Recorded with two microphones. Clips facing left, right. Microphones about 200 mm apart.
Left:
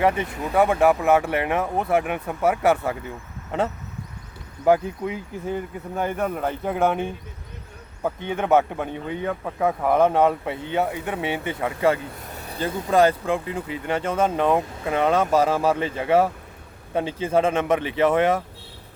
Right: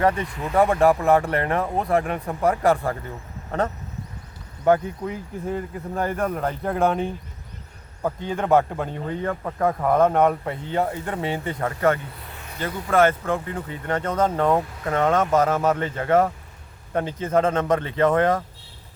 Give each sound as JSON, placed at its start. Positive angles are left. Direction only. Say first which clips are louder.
{"t": 0.0, "sound": "speech", "louder": "even", "side_deg": 5}
{"t": 4.6, "sound": "speech", "louder": "even", "side_deg": 10}
{"t": 8.4, "sound": "speech", "louder": "even", "side_deg": 5}
{"t": 12.2, "sound": "speech", "louder": "left 3 dB", "side_deg": 40}